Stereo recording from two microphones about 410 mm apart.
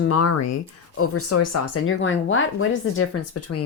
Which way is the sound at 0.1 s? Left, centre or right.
Left.